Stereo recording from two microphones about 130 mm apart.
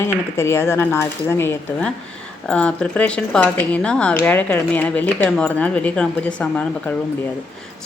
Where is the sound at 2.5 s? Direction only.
10° left (ahead or behind).